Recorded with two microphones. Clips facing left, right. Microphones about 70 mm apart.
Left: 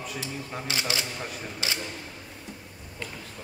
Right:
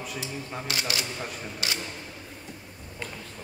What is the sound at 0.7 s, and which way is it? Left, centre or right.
Speech, left.